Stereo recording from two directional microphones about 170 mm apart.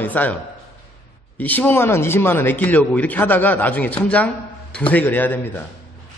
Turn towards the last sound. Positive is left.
turn(degrees=10)  # may be behind; listen again after turning